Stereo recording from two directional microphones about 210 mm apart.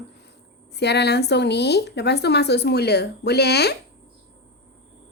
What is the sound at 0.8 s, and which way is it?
Speech, 50° left (ahead or behind).